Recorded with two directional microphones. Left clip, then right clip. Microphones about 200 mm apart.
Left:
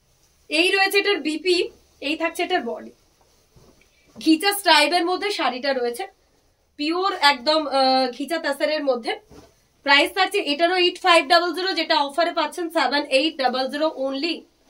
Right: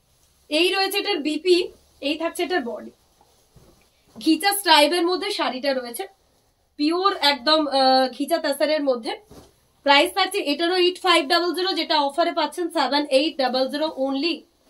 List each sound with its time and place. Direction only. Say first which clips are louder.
0.5 s a woman's voice: left 2 dB; 20° left (ahead or behind)
4.2 s a woman's voice: left 1 dB; 20° left (ahead or behind)